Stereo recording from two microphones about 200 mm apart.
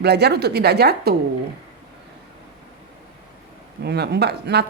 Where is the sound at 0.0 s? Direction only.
55° right (ahead or behind).